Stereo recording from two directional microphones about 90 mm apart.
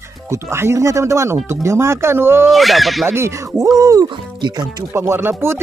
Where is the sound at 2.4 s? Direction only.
Centre (ahead or behind).